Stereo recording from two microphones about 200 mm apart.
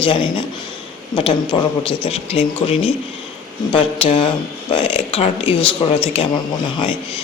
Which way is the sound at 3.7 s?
30° left (ahead or behind).